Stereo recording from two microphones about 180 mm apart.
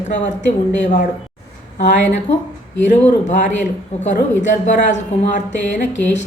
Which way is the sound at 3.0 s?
40° left (ahead or behind).